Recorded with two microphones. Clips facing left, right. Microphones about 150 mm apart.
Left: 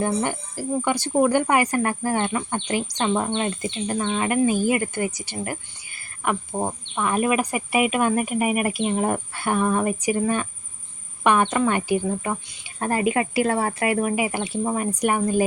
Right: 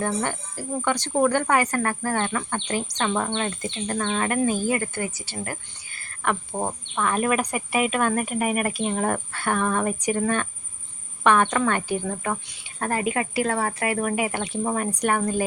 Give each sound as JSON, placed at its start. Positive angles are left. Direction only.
{"t": 0.0, "sound": "speech", "side_deg": 15}
{"t": 14.0, "sound": "speech", "side_deg": 5}